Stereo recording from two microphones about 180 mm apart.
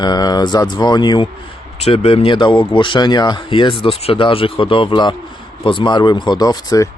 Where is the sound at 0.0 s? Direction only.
20° left (ahead or behind).